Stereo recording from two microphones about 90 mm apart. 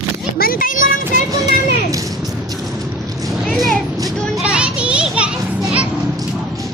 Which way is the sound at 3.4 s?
Centre (ahead or behind).